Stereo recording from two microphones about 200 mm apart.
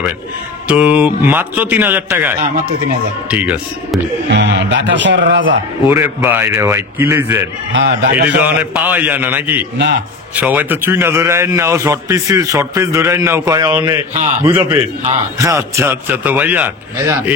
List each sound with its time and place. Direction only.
0.7 s a man's voice: 5° right (ahead or behind)
4.3 s speech: 60° right (ahead or behind)
5.9 s a man's voice: 10° right (ahead or behind)
7.7 s speech: 60° right (ahead or behind)
8.4 s a man's voice: 10° right (ahead or behind)